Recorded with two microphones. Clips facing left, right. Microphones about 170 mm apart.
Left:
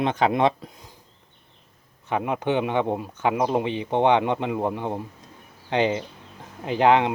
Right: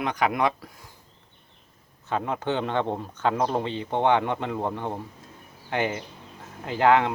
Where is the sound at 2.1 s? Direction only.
15° left (ahead or behind).